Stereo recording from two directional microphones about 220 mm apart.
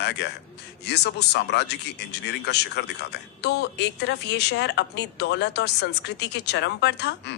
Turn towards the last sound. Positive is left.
turn(degrees=50)  # may be behind; listen again after turning